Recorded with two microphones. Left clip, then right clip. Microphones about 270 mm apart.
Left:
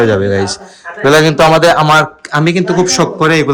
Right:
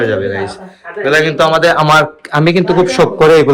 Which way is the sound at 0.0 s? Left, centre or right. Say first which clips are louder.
Left 3 dB; centre.